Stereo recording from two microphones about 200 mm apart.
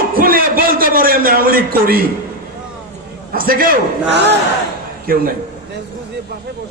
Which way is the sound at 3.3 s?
45° right (ahead or behind).